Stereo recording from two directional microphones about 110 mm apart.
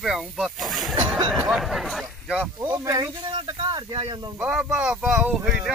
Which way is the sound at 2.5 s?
35° right (ahead or behind).